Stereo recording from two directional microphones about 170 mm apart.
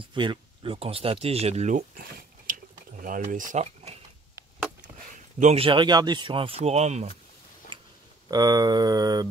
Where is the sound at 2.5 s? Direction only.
55° right (ahead or behind).